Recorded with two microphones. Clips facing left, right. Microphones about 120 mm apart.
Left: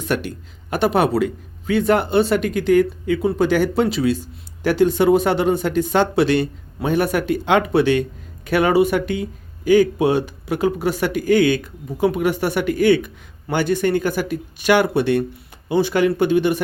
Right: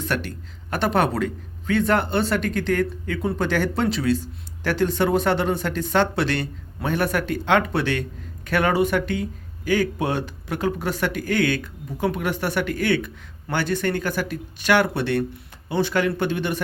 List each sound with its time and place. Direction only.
0.0 s speech: 15° left (ahead or behind)